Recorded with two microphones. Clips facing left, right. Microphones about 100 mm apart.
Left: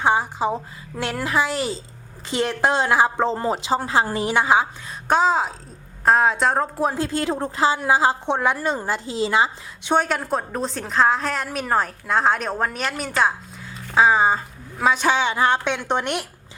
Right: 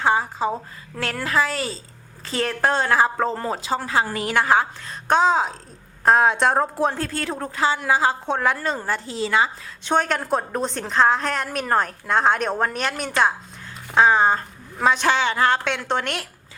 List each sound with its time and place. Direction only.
0.0 s a woman's voice: 20° left (ahead or behind); by 7.0 s centre (ahead or behind)
7.0 s a woman's voice: 25° left (ahead or behind)
9.1 s a woman's voice: 25° left (ahead or behind)
9.8 s a woman's voice: 10° left (ahead or behind)